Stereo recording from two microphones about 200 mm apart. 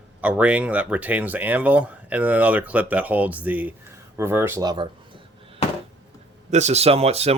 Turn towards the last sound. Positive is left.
turn(degrees=-30)  # may be behind; listen again after turning